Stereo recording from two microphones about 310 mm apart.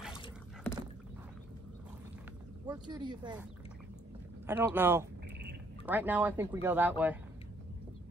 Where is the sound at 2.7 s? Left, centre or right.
Centre.